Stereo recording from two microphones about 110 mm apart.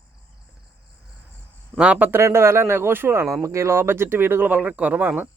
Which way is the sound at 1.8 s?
10° right (ahead or behind).